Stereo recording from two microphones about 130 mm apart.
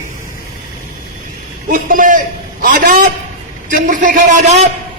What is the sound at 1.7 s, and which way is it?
A man's voice, 90° right.